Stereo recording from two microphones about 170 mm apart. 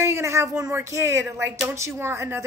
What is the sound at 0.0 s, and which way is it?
Speech, 15° right (ahead or behind).